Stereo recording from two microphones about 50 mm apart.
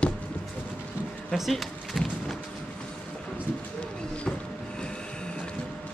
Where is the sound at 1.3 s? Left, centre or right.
Centre.